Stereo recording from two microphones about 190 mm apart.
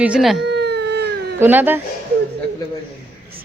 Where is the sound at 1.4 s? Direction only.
10° right (ahead or behind).